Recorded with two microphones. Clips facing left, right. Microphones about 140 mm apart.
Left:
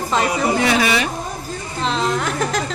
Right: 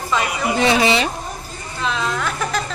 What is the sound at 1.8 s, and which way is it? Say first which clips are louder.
Speech: left 2 dB; 35° left (ahead or behind).